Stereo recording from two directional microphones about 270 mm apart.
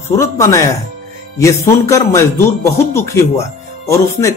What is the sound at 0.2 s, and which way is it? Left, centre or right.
Speech, centre.